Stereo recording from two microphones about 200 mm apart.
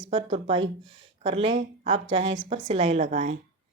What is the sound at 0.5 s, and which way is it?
Speech, 70° right (ahead or behind).